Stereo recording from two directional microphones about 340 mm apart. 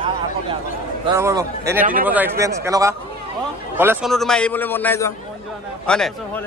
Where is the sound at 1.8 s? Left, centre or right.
Right.